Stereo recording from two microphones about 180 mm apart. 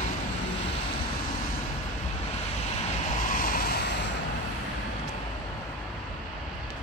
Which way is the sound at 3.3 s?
50° left (ahead or behind).